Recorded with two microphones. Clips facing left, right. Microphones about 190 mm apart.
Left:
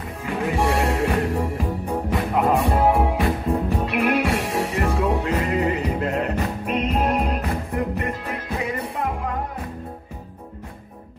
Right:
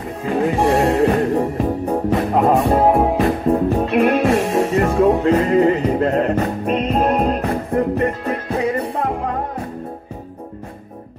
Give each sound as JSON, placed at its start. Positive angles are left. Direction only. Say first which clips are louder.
{"t": 0.2, "sound": "music", "louder": "right 6 dB", "side_deg": -35}
{"t": 7.2, "sound": "music", "louder": "right 6 dB", "side_deg": -50}
{"t": 7.7, "sound": "music", "louder": "right 10 dB", "side_deg": -35}